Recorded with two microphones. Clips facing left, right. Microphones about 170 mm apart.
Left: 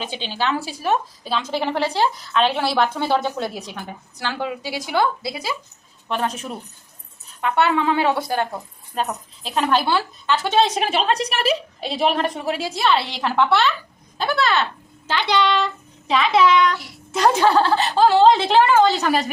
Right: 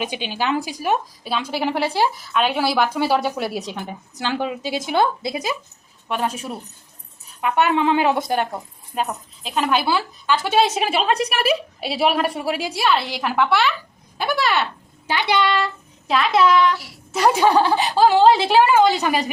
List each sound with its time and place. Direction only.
0.0 s a woman's voice: 15° right (ahead or behind)
6.1 s a woman's voice: 10° right (ahead or behind)
9.0 s speech: centre (ahead or behind)